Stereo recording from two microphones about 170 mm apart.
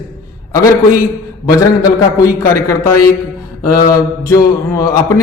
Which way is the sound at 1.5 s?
20° left (ahead or behind).